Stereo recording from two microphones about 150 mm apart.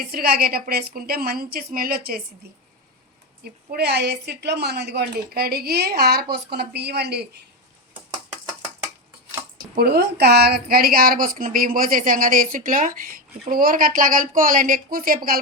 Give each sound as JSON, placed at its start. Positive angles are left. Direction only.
{"t": 0.0, "sound": "a woman's voice", "side_deg": -80}
{"t": 3.4, "sound": "a woman's voice", "side_deg": -90}
{"t": 9.7, "sound": "a woman's voice", "side_deg": -90}